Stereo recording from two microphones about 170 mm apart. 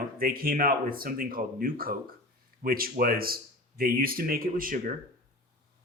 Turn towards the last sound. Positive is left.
turn(degrees=-50)  # may be behind; listen again after turning